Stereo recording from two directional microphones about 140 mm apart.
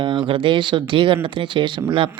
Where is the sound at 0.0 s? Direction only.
35° right (ahead or behind).